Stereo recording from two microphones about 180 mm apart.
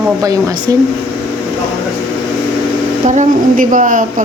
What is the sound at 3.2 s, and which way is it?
Speech, 45° right (ahead or behind).